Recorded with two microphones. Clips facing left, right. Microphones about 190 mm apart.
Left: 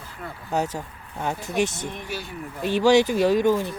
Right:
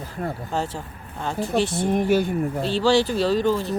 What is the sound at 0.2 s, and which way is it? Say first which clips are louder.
Speech: right 9 dB; 45° right (ahead or behind).